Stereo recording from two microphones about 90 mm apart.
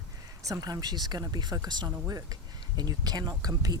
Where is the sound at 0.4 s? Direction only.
40° right (ahead or behind).